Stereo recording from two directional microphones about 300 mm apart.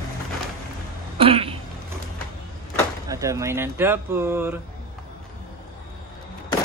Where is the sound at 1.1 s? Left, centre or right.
Centre.